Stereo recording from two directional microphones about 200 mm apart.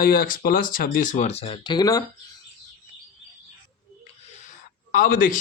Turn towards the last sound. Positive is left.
turn(degrees=45)  # may be behind; listen again after turning